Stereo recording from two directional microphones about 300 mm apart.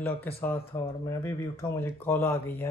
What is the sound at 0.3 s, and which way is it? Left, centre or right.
Speech, centre.